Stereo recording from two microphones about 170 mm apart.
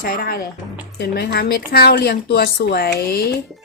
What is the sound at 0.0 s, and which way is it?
A woman's voice, 60° left (ahead or behind).